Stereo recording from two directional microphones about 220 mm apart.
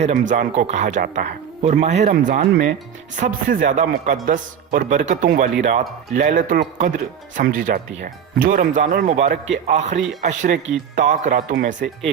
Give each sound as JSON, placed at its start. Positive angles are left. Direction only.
{"t": 0.0, "sound": "speech", "side_deg": -30}
{"t": 3.2, "sound": "speech", "side_deg": -35}